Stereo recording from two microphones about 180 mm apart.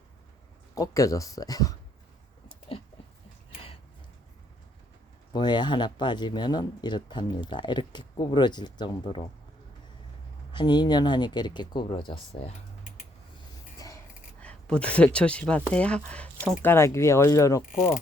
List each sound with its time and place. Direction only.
0.8 s speech: 20° left (ahead or behind)
5.3 s speech: 25° left (ahead or behind)
10.5 s speech: 25° left (ahead or behind)
13.7 s a sound: 20° left (ahead or behind)
14.4 s speech: 5° left (ahead or behind)
17.7 s speech: 50° left (ahead or behind)